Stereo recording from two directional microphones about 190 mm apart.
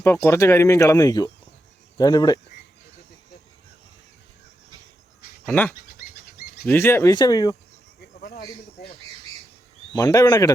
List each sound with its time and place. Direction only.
0.0 s speech: 15° left (ahead or behind)
5.5 s speech: 5° left (ahead or behind)
5.7 s bird: 50° left (ahead or behind)
6.7 s speech: 10° left (ahead or behind)
9.9 s speech: 20° left (ahead or behind)